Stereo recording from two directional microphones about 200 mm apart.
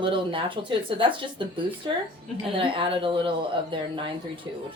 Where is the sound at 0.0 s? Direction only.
25° right (ahead or behind).